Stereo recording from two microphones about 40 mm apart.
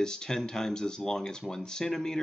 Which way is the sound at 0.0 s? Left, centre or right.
Centre.